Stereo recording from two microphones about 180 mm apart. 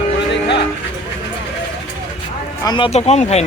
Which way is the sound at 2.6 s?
25° left (ahead or behind).